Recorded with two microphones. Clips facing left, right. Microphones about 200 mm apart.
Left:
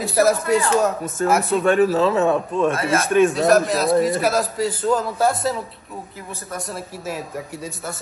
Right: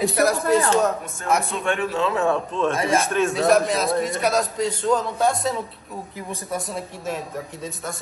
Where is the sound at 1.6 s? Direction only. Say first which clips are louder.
Left 7 dB; 40° left (ahead or behind).